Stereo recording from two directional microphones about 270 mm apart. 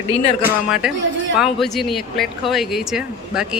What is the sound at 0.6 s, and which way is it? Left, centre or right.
Speech, centre.